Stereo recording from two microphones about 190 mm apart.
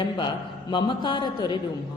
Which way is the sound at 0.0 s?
25° left (ahead or behind).